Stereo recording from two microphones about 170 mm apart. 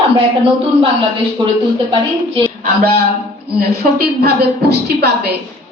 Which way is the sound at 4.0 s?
70° right (ahead or behind).